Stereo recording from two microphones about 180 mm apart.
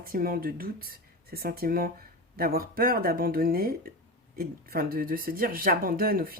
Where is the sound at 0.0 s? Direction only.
55° right (ahead or behind).